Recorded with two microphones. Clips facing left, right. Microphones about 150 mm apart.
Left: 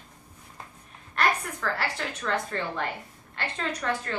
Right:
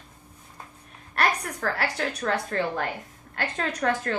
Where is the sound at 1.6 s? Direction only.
45° right (ahead or behind).